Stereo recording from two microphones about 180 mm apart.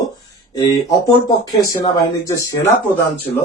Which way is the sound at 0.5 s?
20° left (ahead or behind).